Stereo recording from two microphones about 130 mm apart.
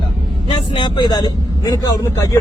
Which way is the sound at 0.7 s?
35° left (ahead or behind).